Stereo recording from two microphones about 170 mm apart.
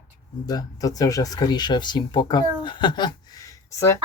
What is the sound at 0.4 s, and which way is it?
Speech, 20° left (ahead or behind).